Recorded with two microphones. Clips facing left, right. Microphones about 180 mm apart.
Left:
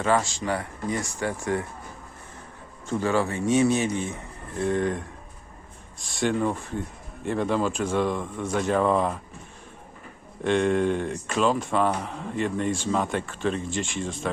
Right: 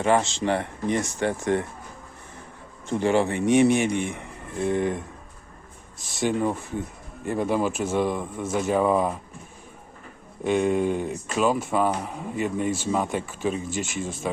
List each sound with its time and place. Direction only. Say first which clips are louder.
0.0 s speech: right 2 dB; 20° right (ahead or behind)
2.8 s speech: right 3 dB; 20° right (ahead or behind)
6.1 s speech: even; 10° right (ahead or behind)
10.4 s speech: even; 5° right (ahead or behind)